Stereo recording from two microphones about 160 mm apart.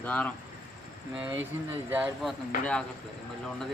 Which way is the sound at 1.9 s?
10° right (ahead or behind).